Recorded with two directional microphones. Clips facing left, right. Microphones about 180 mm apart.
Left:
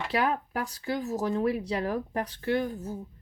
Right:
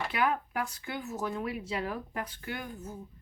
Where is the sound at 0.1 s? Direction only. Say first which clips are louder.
Left 5 dB; 35° left (ahead or behind).